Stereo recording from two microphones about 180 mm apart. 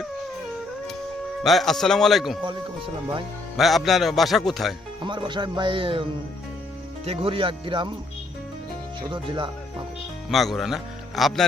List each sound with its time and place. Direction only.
1.5 s speech: centre (ahead or behind)
2.4 s speech: 25° right (ahead or behind)
3.6 s speech: centre (ahead or behind)
5.0 s speech: 25° right (ahead or behind)
9.0 s speech: 25° right (ahead or behind)
10.2 s speech: centre (ahead or behind)